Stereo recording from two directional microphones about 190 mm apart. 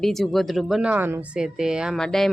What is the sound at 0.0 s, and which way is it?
Speech, centre (ahead or behind).